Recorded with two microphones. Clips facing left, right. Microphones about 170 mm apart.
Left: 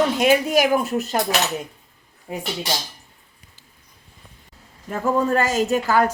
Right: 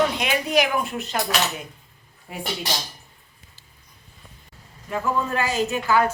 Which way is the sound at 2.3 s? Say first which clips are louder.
Left 5 dB; 25° left (ahead or behind).